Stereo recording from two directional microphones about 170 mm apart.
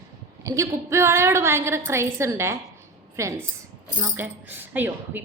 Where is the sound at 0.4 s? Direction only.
20° right (ahead or behind).